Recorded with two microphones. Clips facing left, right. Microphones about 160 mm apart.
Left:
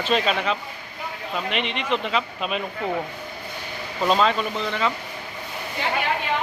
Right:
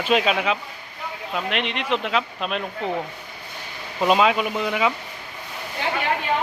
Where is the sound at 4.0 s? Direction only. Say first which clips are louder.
Right 2 dB; 5° right (ahead or behind).